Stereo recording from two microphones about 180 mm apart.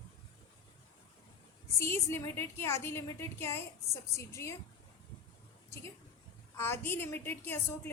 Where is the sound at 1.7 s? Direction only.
15° left (ahead or behind).